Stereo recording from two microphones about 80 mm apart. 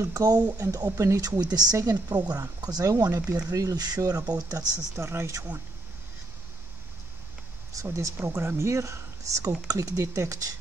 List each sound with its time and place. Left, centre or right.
0.0 s speech: right
7.8 s speech: right